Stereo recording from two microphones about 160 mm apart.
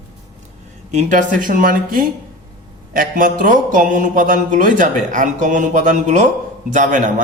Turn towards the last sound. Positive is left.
turn(degrees=-50)  # may be behind; listen again after turning